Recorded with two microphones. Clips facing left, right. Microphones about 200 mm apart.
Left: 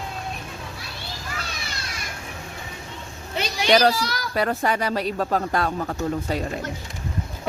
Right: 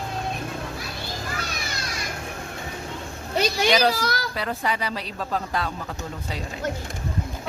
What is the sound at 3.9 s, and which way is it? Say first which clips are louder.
Speech: right 1 dB; 45° right (ahead or behind).